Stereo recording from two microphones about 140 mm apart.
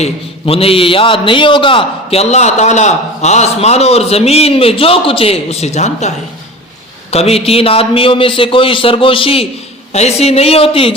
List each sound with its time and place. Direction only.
0.0 s a man's voice: 45° left (ahead or behind)